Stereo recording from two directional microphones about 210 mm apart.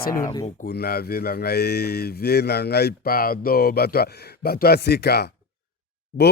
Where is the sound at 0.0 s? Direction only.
45° left (ahead or behind).